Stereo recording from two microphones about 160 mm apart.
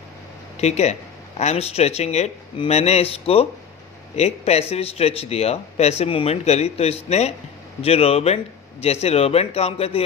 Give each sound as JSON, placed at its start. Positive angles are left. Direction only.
{"t": 0.6, "sound": "speech", "side_deg": 45}